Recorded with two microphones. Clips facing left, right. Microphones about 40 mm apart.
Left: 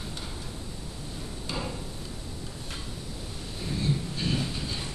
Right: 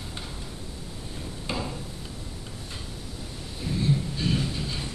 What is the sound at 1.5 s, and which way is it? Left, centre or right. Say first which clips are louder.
Tick-tock: right 3 dB; right.